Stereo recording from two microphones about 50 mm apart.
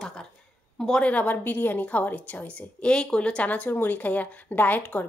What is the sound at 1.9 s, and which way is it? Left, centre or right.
A woman's voice, left.